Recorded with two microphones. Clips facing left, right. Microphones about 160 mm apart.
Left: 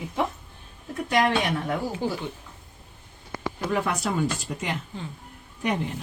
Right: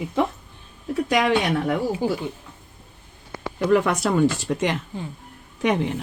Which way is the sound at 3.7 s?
85° right.